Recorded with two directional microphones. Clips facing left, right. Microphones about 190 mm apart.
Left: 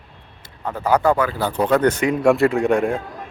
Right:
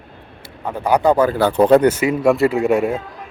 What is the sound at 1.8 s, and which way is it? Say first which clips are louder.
Speech: right 1 dB; 5° right (ahead or behind).